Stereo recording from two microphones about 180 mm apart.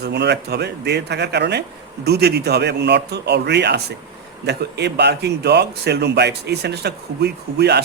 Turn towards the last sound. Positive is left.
turn(degrees=-65)  # may be behind; listen again after turning